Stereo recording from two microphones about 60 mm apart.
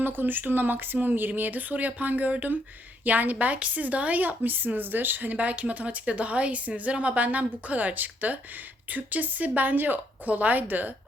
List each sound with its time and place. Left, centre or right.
0.0 s a woman's voice: right